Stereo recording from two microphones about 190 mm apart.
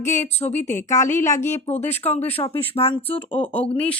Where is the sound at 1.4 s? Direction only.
40° left (ahead or behind).